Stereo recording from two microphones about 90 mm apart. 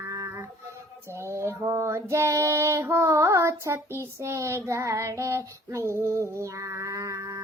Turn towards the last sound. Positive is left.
turn(degrees=-35)  # may be behind; listen again after turning